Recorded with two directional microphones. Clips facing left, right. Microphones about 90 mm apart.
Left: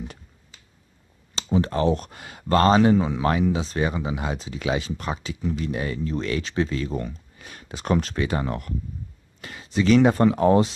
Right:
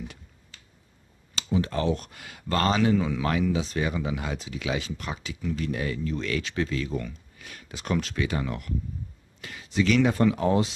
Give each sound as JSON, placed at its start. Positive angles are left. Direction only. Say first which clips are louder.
{"t": 1.3, "sound": "speech", "louder": "left 4 dB", "side_deg": 35}